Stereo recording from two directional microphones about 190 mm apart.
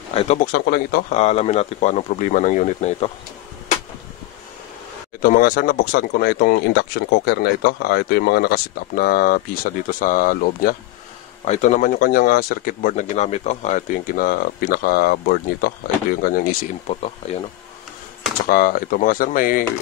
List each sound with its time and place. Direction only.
0.1 s speech: 30° left (ahead or behind)
0.5 s speech: 55° left (ahead or behind)
1.1 s speech: 35° left (ahead or behind)
5.2 s speech: 50° left (ahead or behind)
11.4 s speech: 40° left (ahead or behind)
16.8 s speech: 35° left (ahead or behind)
18.5 s speech: 50° left (ahead or behind)